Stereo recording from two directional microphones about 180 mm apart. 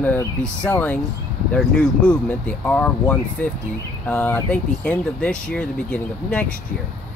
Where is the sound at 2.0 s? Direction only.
10° left (ahead or behind).